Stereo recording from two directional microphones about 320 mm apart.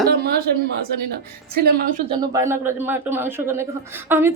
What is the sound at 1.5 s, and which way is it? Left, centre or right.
Speech, right.